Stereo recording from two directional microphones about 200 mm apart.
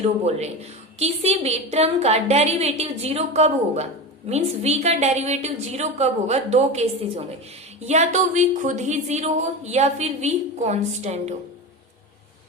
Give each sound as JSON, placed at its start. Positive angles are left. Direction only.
{"t": 0.3, "sound": "a woman's voice", "side_deg": -35}
{"t": 7.9, "sound": "a woman's voice", "side_deg": -35}